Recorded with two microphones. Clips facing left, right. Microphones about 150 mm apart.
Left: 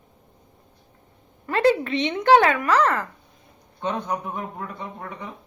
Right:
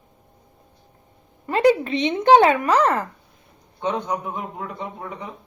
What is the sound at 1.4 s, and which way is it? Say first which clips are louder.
Speech: right 2 dB; 20° right (ahead or behind).